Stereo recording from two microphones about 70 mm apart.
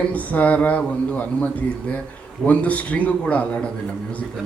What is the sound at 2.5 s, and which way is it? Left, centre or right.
A man's voice, left.